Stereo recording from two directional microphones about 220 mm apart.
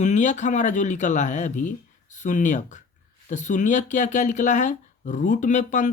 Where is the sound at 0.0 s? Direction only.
35° left (ahead or behind).